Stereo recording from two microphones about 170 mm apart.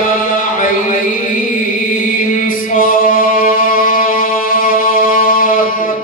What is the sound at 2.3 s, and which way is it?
Music, 55° left (ahead or behind).